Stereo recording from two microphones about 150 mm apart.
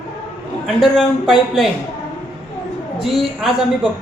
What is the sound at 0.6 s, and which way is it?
A man's voice, centre (ahead or behind).